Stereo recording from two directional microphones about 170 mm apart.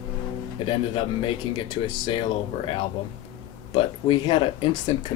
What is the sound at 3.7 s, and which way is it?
Speech, 30° left (ahead or behind).